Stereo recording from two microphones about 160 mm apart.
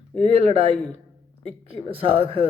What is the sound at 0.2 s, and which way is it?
Speech, 40° right (ahead or behind).